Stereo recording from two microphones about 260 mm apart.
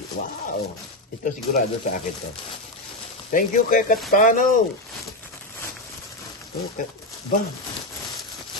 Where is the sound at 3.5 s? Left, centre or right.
Left.